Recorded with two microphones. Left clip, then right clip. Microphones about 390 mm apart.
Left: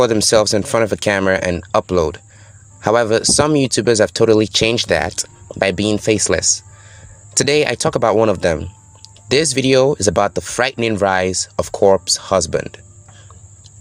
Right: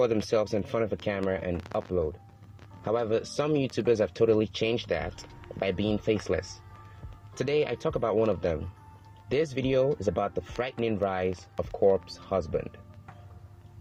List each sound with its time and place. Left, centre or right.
0.0 s speech: left